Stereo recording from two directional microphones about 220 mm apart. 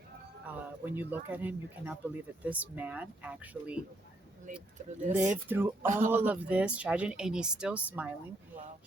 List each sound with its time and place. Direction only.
0.4 s speech: 10° right (ahead or behind)
4.8 s speech: 35° right (ahead or behind)
5.1 s speech: 5° right (ahead or behind)
5.8 s speech: 35° right (ahead or behind)
6.1 s speech: 10° right (ahead or behind)